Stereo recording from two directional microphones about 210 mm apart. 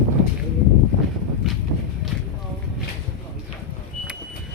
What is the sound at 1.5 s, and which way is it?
Walk, centre (ahead or behind).